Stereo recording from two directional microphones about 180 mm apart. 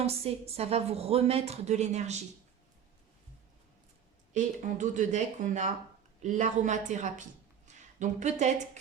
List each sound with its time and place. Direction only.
0.0 s a woman's voice: 35° right (ahead or behind)
4.4 s a woman's voice: 45° right (ahead or behind)